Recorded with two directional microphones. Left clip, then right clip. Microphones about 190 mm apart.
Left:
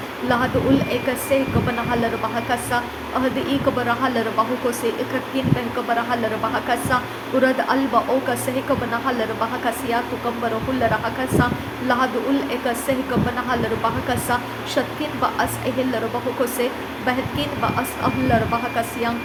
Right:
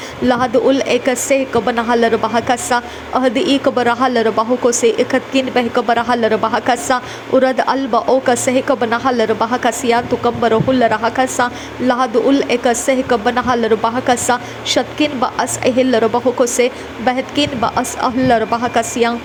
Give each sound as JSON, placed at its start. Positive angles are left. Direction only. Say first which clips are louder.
{"t": 0.3, "sound": "a woman's voice", "louder": "right 6 dB", "side_deg": -45}